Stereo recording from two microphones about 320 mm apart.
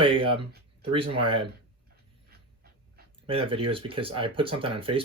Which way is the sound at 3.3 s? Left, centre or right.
Centre.